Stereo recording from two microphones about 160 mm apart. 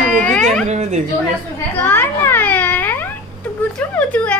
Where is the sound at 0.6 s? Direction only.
45° right (ahead or behind).